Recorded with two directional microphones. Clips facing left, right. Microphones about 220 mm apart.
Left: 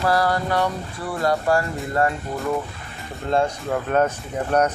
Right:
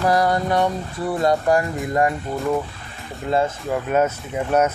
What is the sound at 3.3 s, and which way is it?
Speech, 5° right (ahead or behind).